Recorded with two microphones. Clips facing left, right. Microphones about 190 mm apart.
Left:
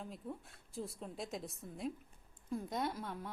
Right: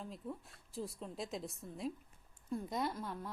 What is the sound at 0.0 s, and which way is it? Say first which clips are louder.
A woman's voice: even; centre (ahead or behind).